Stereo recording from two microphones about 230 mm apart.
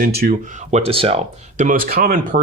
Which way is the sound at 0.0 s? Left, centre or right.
Right.